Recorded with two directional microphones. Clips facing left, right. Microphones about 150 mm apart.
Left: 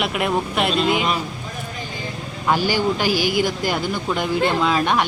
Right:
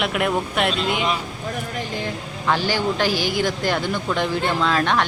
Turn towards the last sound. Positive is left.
turn(degrees=10)  # may be behind; listen again after turning